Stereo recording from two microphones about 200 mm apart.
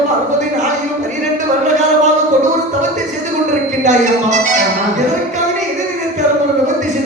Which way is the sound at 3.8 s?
35° right (ahead or behind).